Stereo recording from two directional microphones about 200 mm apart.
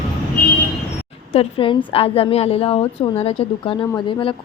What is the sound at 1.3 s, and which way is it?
A woman's voice, 30° left (ahead or behind).